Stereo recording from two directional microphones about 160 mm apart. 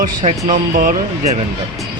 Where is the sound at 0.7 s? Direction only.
60° right (ahead or behind).